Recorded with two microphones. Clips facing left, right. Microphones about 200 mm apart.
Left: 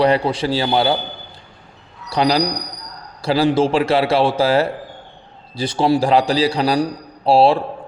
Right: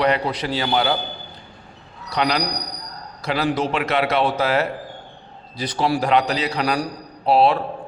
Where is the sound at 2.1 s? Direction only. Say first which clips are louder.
Left 5 dB; 30° left (ahead or behind).